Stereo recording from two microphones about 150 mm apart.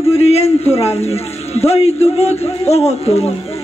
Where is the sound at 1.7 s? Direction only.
45° left (ahead or behind).